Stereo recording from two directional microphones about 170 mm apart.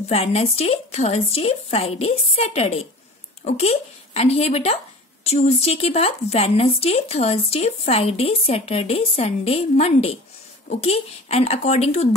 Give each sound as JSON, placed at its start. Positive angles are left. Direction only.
{"t": 0.1, "sound": "speech", "side_deg": 40}